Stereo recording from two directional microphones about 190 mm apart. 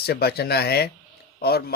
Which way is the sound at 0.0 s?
55° left (ahead or behind).